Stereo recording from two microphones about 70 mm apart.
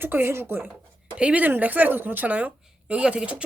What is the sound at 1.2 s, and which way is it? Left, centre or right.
A woman's voice, centre.